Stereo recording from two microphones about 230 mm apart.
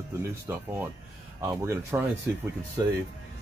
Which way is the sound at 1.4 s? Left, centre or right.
Centre.